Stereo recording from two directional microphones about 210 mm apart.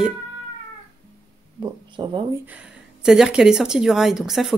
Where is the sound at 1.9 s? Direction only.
20° right (ahead or behind).